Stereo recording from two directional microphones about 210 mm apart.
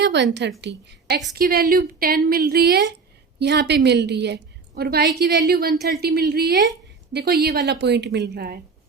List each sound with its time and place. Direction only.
0.0 s a woman's voice: 55° right (ahead or behind)